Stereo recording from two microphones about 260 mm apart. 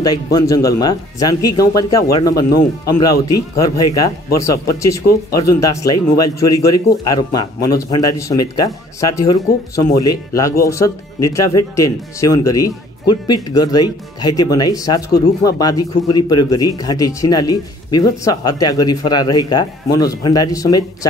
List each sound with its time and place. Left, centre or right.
0.0 s speech: centre
6.1 s speech: left
7.1 s speech: centre